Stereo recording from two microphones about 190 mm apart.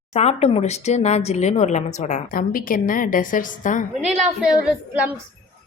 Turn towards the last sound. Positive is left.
turn(degrees=-5)  # may be behind; listen again after turning